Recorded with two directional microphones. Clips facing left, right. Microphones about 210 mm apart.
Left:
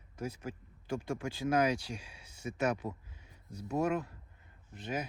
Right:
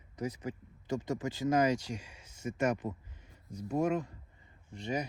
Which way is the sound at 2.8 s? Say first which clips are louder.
Right 2 dB; 25° right (ahead or behind).